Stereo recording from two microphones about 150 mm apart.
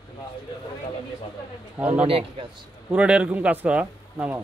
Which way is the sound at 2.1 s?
40° right (ahead or behind).